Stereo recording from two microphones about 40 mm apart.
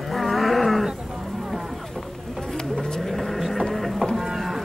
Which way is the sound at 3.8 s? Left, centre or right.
Centre.